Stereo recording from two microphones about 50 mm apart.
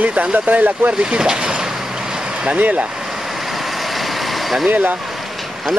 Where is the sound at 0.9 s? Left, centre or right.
Centre.